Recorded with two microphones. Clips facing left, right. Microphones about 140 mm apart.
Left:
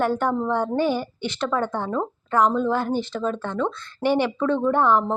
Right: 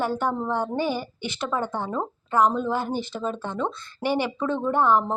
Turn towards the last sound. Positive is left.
turn(degrees=-5)  # may be behind; listen again after turning